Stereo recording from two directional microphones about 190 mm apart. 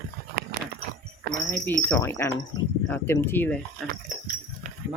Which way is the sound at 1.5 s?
10° left (ahead or behind).